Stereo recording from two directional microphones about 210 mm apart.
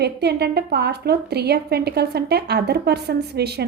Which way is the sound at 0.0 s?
50° right (ahead or behind).